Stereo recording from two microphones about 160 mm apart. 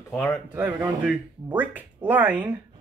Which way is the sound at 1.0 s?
10° right (ahead or behind).